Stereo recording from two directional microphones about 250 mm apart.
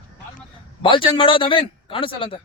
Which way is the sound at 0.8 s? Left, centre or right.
Left.